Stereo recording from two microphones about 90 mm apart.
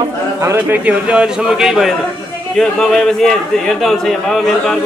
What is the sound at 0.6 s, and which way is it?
A man's voice, 20° right (ahead or behind).